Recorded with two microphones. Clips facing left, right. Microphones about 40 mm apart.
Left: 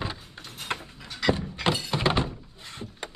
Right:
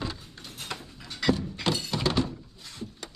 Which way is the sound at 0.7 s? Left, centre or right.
Left.